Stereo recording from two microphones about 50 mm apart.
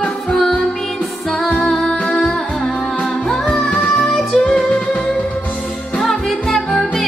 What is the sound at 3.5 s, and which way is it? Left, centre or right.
Music, centre.